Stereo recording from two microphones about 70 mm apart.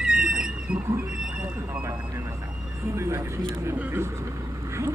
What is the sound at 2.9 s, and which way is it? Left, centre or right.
Single-lens reflex camera, right.